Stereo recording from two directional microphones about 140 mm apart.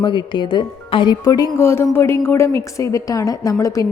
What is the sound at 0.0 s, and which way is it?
Speech, 35° left (ahead or behind).